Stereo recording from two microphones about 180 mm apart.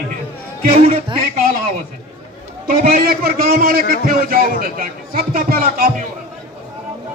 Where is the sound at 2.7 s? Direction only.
55° right (ahead or behind).